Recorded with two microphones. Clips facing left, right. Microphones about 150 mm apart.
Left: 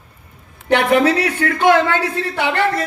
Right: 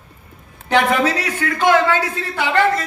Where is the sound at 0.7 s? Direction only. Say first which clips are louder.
Left 3 dB; 60° left (ahead or behind).